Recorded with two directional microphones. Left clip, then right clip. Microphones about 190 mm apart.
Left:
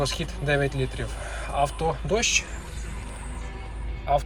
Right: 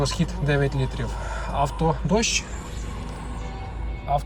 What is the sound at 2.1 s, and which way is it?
Speech, 5° right (ahead or behind).